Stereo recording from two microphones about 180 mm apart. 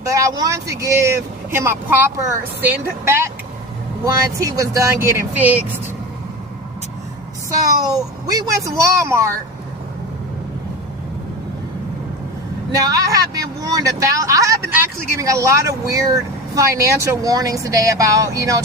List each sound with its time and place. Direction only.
0.0 s speech: 15° right (ahead or behind)
7.6 s speech: 20° right (ahead or behind)
12.7 s speech: 20° right (ahead or behind)